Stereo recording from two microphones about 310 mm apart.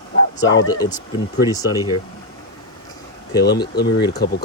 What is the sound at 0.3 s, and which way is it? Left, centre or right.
Speech, centre.